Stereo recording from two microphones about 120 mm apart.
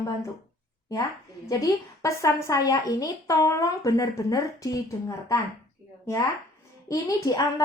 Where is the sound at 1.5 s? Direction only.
25° left (ahead or behind).